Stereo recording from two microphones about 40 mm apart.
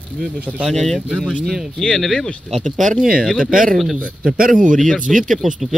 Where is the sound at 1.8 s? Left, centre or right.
Centre.